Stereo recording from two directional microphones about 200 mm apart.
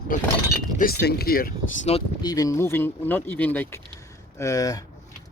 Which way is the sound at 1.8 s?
30° left (ahead or behind).